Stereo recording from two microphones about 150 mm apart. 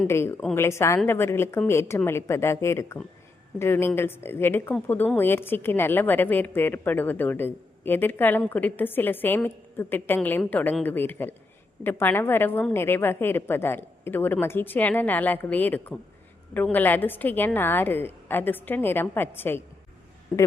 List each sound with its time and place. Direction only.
0.1 s a woman's voice: 15° left (ahead or behind)